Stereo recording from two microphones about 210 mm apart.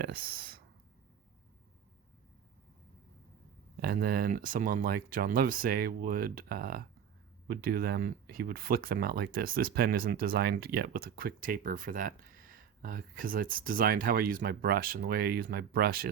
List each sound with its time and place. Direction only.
0.0 s speech: 45° right (ahead or behind)
3.8 s speech: 45° right (ahead or behind)